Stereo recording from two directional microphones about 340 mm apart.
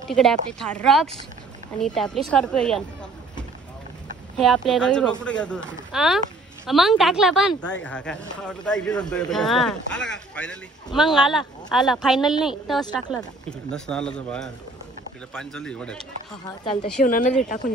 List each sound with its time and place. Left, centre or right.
0.1 s speech: centre
4.4 s speech: centre
17.0 s speech: left